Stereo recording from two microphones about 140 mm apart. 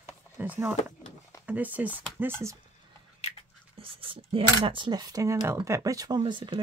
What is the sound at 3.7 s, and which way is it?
Speech, 40° right (ahead or behind).